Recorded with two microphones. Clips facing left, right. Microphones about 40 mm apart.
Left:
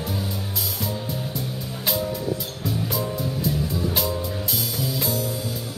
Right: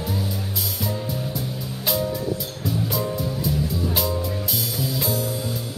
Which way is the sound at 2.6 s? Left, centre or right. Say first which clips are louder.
Right 2 dB; centre.